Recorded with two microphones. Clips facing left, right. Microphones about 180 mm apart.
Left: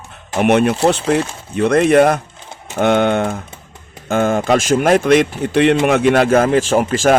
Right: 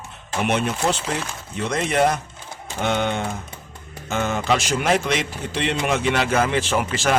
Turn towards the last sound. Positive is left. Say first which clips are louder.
# left 8 dB
turn(degrees=45)  # may be behind; listen again after turning